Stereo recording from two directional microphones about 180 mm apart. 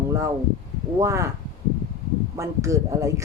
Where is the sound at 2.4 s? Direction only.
15° right (ahead or behind).